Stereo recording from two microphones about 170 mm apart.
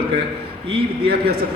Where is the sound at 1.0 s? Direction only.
70° right (ahead or behind).